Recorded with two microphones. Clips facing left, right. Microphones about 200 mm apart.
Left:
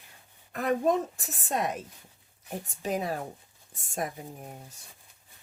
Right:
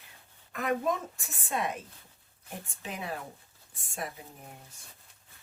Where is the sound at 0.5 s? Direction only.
35° left (ahead or behind).